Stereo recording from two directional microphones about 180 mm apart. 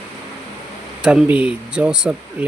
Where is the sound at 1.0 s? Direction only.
5° right (ahead or behind).